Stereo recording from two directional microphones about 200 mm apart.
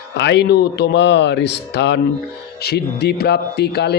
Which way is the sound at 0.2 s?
60° left (ahead or behind).